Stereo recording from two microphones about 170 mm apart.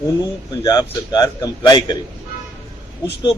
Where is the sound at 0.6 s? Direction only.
25° left (ahead or behind).